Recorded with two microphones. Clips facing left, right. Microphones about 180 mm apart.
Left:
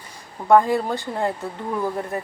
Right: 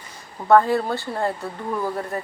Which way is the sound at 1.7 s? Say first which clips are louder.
Left 1 dB; 5° left (ahead or behind).